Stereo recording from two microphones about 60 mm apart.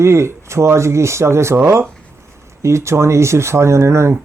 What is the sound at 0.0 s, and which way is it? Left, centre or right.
Speech, right.